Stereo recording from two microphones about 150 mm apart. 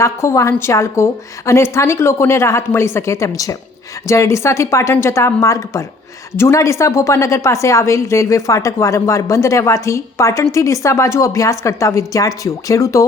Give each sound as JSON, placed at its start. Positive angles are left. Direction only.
{"t": 0.0, "sound": "a woman's voice", "side_deg": 20}